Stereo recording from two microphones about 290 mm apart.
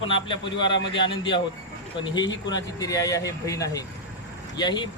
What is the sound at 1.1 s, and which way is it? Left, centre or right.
Speech, centre.